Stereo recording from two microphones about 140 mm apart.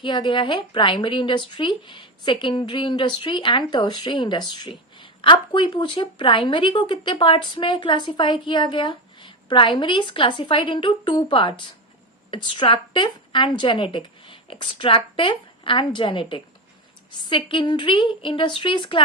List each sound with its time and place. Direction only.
0.0 s a woman's voice: 35° left (ahead or behind)